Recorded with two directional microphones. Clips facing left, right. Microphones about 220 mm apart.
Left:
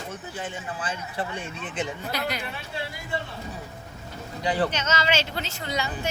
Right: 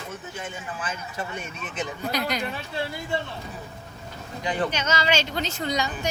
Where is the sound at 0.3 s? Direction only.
30° left (ahead or behind).